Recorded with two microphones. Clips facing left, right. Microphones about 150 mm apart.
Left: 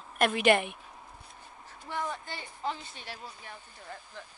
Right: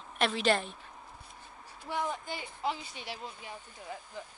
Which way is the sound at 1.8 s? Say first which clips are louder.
Right 1 dB; 15° right (ahead or behind).